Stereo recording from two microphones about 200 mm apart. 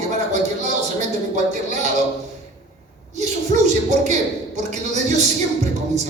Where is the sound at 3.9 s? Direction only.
35° right (ahead or behind).